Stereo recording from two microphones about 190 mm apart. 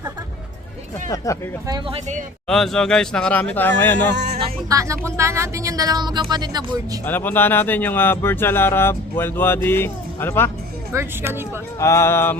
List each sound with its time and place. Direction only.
1.1 s speech: 15° left (ahead or behind)
1.6 s speech: 20° right (ahead or behind)
2.5 s speech: centre (ahead or behind)
4.1 s a sound: 65° right (ahead or behind)
4.7 s speech: 15° right (ahead or behind)
7.0 s speech: 10° left (ahead or behind)
10.9 s speech: 10° right (ahead or behind)
11.8 s speech: 15° left (ahead or behind)